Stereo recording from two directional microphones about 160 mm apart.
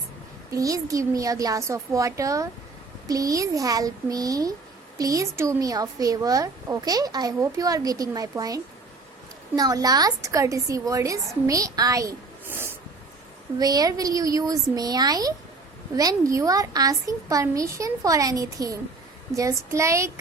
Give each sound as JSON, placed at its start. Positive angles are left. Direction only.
{"t": 0.5, "sound": "speech", "side_deg": -20}